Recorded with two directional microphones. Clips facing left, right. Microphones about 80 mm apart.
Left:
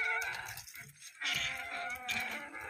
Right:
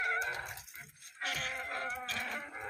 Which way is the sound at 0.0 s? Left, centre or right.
Right.